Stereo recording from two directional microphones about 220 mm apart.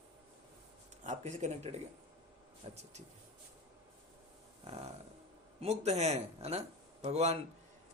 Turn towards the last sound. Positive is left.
turn(degrees=-30)  # may be behind; listen again after turning